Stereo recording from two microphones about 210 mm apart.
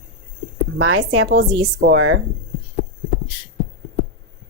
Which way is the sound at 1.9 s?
75° right (ahead or behind).